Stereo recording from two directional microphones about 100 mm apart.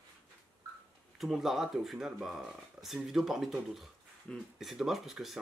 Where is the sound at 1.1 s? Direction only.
5° right (ahead or behind).